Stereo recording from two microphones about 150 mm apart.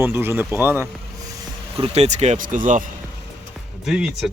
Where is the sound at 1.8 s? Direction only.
45° right (ahead or behind).